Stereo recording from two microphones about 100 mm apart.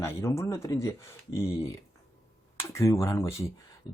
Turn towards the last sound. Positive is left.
turn(degrees=30)  # may be behind; listen again after turning